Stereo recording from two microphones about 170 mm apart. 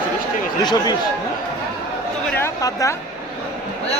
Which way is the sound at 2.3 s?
15° left (ahead or behind).